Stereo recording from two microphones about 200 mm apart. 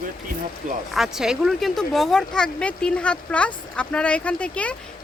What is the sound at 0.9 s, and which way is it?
Speech, centre (ahead or behind).